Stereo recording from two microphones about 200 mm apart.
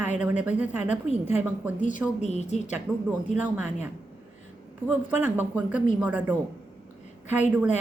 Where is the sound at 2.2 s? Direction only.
35° left (ahead or behind).